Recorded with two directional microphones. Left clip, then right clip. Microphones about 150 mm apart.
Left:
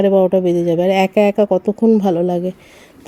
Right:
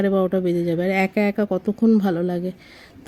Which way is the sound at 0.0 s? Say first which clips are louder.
Left 8 dB; 10° left (ahead or behind).